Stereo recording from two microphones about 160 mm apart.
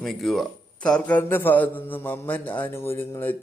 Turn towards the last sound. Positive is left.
turn(degrees=15)  # may be behind; listen again after turning